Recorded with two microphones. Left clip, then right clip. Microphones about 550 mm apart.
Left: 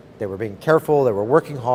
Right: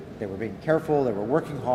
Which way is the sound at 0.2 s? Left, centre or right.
Left.